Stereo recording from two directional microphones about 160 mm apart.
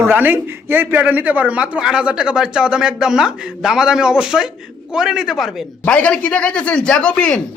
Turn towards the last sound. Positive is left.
turn(degrees=5)  # may be behind; listen again after turning